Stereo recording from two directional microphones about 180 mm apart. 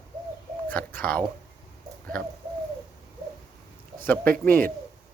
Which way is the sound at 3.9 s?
10° left (ahead or behind).